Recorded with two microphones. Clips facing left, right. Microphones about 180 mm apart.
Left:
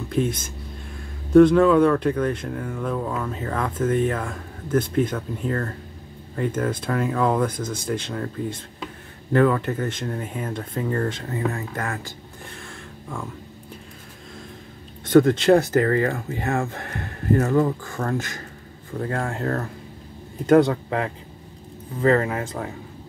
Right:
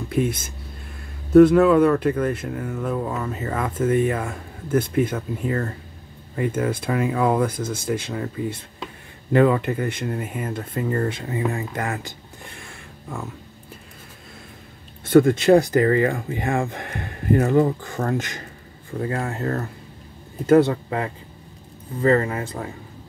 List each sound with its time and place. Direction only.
0.1 s speech: 10° right (ahead or behind)
12.5 s a sound: 10° right (ahead or behind)
15.0 s speech: 10° right (ahead or behind)
18.9 s a man's voice: 5° right (ahead or behind)